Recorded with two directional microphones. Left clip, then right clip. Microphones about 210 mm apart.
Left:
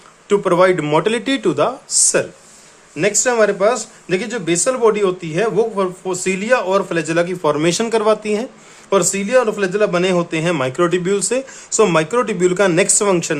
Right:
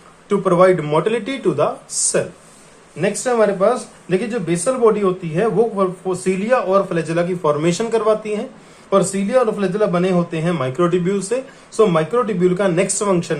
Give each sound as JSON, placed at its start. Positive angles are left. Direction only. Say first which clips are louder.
{"t": 0.3, "sound": "speech", "louder": "even", "side_deg": 30}